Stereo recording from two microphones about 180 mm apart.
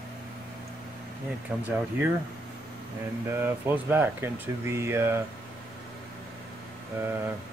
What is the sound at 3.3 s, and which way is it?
Speech, 10° right (ahead or behind).